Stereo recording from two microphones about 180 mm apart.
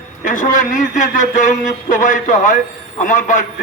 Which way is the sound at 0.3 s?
45° left (ahead or behind).